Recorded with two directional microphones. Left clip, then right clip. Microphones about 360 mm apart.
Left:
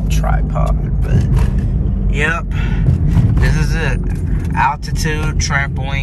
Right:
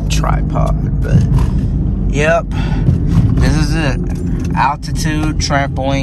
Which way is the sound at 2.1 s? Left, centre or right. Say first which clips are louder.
Right 5 dB; centre.